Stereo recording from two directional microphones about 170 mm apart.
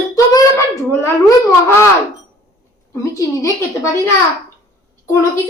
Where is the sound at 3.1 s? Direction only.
20° left (ahead or behind).